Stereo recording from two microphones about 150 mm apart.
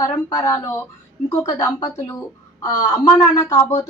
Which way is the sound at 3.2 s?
20° left (ahead or behind).